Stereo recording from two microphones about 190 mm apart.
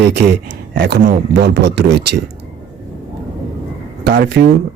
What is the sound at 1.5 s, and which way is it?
Speech, 65° right (ahead or behind).